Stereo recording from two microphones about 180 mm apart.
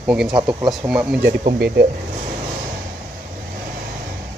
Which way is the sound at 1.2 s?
60° right (ahead or behind).